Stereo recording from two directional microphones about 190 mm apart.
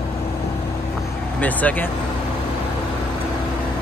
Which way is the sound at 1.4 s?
10° left (ahead or behind).